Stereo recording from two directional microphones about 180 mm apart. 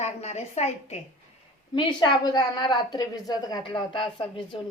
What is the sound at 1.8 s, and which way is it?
A woman's voice, 25° left (ahead or behind).